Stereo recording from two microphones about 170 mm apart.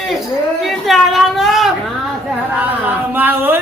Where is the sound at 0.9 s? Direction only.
Centre (ahead or behind).